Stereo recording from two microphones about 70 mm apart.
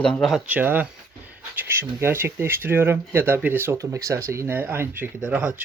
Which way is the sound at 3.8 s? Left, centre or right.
Right.